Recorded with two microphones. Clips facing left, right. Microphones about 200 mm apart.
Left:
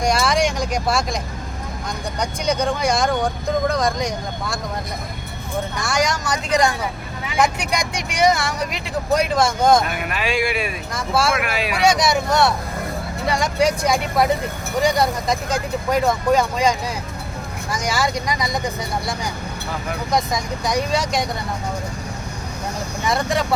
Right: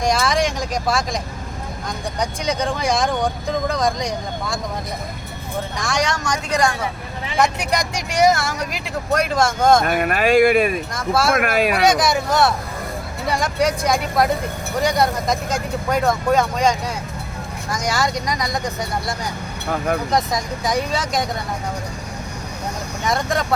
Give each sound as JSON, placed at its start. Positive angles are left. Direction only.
{"t": 0.0, "sound": "vehicle", "side_deg": 0}
{"t": 2.1, "sound": "speech", "side_deg": 0}
{"t": 5.8, "sound": "speech", "side_deg": 0}
{"t": 7.3, "sound": "speech", "side_deg": 0}
{"t": 9.8, "sound": "speech", "side_deg": -50}
{"t": 11.8, "sound": "speech", "side_deg": 0}
{"t": 20.1, "sound": "speech", "side_deg": 0}
{"t": 23.0, "sound": "speech", "side_deg": 0}